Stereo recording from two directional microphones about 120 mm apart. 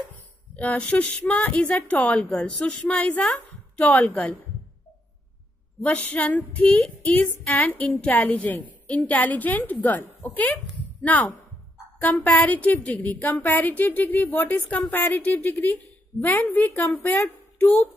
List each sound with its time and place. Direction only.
0.6 s a woman's voice: 10° left (ahead or behind)
5.8 s a woman's voice: 15° left (ahead or behind)